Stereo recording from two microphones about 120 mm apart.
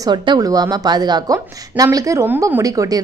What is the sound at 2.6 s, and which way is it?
Speech, 30° right (ahead or behind).